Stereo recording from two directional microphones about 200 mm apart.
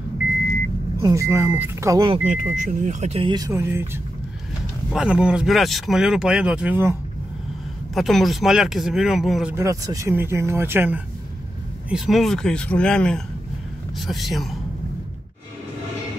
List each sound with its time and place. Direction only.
1.0 s speech: 15° right (ahead or behind)
2.2 s speech: 40° right (ahead or behind); by 7.0 s 10° right (ahead or behind)
7.9 s speech: centre (ahead or behind)
9.6 s speech: 15° right (ahead or behind)
11.9 s speech: centre (ahead or behind)